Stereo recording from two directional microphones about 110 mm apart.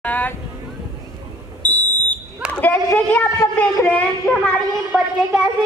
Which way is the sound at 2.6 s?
15° left (ahead or behind).